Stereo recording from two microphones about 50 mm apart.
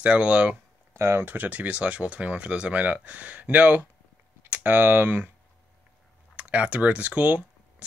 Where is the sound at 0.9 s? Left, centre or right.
Right.